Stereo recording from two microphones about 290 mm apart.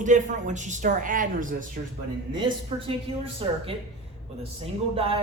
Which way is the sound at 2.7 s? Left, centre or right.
Centre.